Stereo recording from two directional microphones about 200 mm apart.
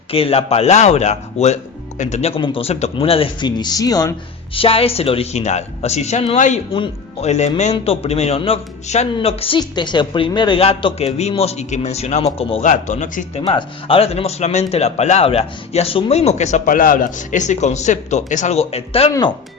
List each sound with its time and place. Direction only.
0.1 s speech: 30° left (ahead or behind)
13.4 s speech: 25° left (ahead or behind)